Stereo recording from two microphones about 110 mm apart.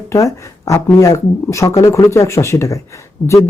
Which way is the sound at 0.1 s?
30° left (ahead or behind).